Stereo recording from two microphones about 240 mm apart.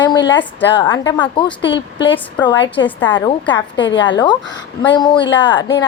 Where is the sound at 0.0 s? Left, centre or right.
Centre.